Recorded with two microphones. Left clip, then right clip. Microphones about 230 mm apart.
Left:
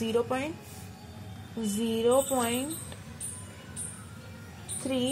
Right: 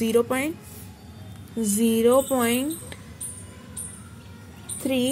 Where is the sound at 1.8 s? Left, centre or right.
Right.